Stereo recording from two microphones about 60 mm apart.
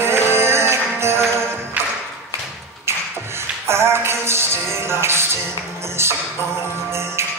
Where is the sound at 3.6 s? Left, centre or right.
Right.